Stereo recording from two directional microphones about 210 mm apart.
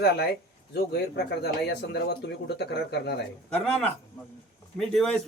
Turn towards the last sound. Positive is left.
turn(degrees=5)  # may be behind; listen again after turning